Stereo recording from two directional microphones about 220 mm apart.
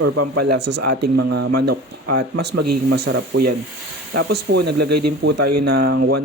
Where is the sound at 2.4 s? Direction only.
50° right (ahead or behind).